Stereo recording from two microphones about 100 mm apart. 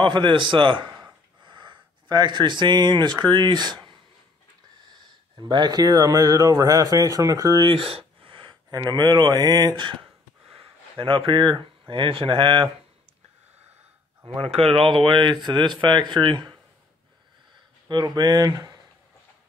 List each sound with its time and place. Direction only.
0.0 s speech: 55° right (ahead or behind); by 7.6 s 35° right (ahead or behind)
7.6 s a sound: 65° right (ahead or behind)
8.6 s speech: 40° right (ahead or behind)
10.6 s a sound: 65° right (ahead or behind)
11.9 s speech: 60° right (ahead or behind)
14.2 s speech: 65° right (ahead or behind); by 16.5 s 50° right (ahead or behind)
17.8 s speech: 45° right (ahead or behind)